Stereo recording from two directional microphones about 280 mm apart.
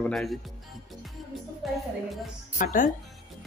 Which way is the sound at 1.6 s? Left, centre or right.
Centre.